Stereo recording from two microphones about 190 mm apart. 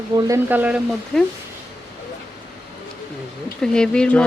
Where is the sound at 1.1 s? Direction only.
5° left (ahead or behind).